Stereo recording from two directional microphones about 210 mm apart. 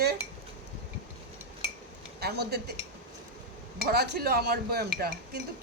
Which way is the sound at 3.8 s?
50° right (ahead or behind).